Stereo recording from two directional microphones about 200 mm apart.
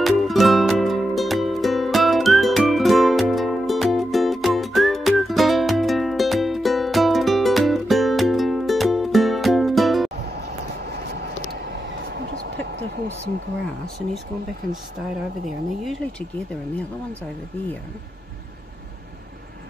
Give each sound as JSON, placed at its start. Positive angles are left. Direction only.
{"t": 0.0, "sound": "music", "side_deg": 0}
{"t": 10.8, "sound": "a sound", "side_deg": -55}
{"t": 15.8, "sound": "speech", "side_deg": 0}